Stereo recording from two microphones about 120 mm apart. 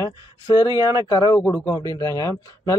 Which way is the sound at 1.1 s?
35° left (ahead or behind).